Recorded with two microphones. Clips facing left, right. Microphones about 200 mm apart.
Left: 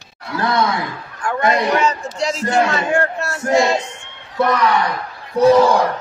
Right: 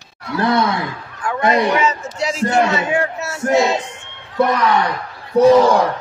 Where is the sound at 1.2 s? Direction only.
Centre (ahead or behind).